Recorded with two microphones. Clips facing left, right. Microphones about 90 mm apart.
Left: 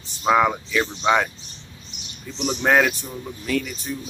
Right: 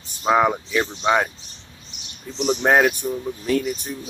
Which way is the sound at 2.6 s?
20° right (ahead or behind).